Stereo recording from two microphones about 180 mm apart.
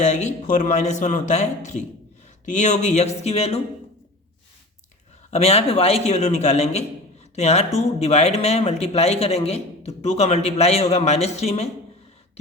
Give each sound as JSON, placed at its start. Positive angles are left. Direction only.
{"t": 0.0, "sound": "speech", "side_deg": 40}
{"t": 5.3, "sound": "speech", "side_deg": 35}